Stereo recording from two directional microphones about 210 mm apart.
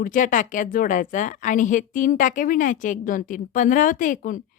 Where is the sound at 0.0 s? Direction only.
40° left (ahead or behind).